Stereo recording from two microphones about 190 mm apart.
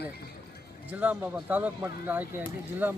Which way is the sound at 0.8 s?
5° right (ahead or behind).